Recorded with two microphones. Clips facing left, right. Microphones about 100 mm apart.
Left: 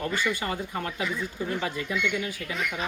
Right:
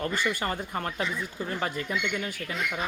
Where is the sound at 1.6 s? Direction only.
45° right (ahead or behind).